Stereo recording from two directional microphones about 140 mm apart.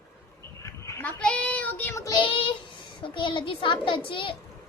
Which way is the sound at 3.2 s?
35° left (ahead or behind).